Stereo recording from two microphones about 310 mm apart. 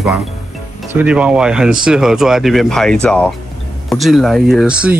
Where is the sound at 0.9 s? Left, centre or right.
Centre.